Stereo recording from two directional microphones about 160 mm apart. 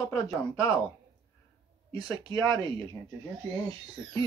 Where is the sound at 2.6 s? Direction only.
30° right (ahead or behind).